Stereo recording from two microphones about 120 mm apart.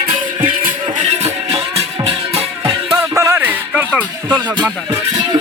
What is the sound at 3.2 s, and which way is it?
Music, 20° right (ahead or behind).